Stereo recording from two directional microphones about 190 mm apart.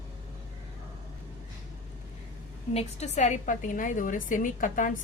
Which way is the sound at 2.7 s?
35° left (ahead or behind).